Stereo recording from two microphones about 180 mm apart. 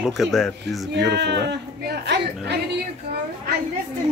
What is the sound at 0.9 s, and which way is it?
Speech, 70° right (ahead or behind).